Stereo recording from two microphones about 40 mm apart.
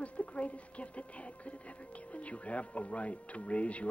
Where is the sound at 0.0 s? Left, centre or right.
Left.